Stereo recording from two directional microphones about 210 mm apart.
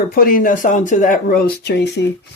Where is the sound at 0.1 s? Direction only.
45° left (ahead or behind).